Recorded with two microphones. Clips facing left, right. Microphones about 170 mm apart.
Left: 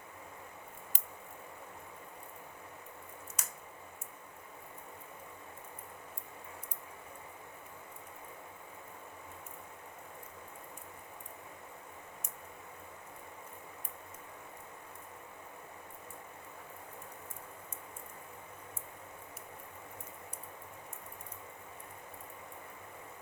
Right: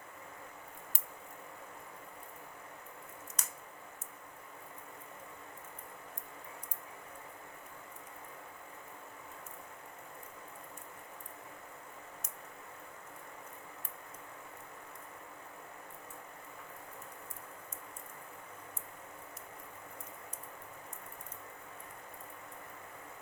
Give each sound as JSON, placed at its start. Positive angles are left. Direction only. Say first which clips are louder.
{"t": 3.4, "sound": "squish", "louder": "left 1 dB", "side_deg": 10}